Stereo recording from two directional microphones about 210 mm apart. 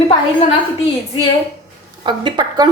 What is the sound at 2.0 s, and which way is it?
Speech, 20° right (ahead or behind).